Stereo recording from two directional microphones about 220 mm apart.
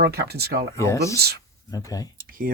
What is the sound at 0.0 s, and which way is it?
Speech, 45° right (ahead or behind).